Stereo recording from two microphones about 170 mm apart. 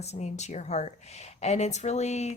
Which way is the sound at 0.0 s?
40° left (ahead or behind).